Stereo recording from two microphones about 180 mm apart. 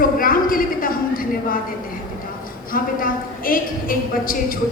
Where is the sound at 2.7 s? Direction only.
50° left (ahead or behind).